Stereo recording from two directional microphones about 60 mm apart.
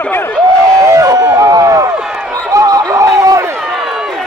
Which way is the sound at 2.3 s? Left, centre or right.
Right.